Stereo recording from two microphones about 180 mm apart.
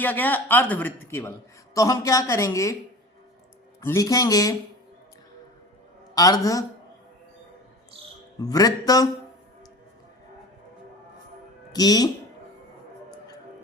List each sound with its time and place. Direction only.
0.0 s a man's voice: 10° left (ahead or behind)
3.8 s speech: 15° left (ahead or behind)
6.1 s speech: 20° left (ahead or behind)
8.4 s speech: 20° left (ahead or behind)
11.7 s speech: 20° left (ahead or behind)